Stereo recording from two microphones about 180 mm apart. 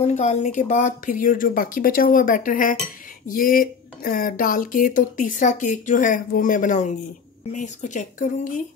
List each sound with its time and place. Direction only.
0.0 s speech: 40° left (ahead or behind)